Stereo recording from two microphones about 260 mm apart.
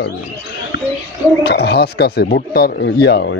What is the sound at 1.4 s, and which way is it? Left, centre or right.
Speech, left.